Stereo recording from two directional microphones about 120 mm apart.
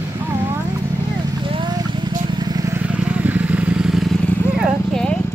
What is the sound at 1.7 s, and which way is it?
Vehicle, 35° right (ahead or behind).